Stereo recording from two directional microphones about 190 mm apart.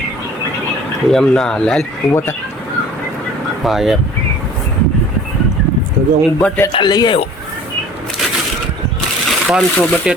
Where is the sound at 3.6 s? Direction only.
Centre (ahead or behind).